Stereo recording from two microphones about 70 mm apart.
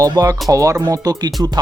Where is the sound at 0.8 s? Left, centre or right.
Right.